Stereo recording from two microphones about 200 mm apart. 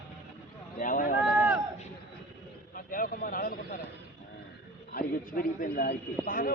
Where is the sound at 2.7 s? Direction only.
45° left (ahead or behind).